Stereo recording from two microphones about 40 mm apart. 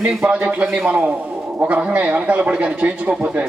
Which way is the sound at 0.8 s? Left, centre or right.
Right.